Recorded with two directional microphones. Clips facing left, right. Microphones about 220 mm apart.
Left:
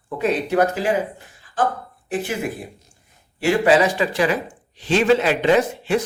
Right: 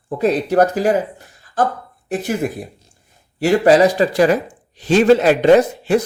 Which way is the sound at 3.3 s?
40° right (ahead or behind).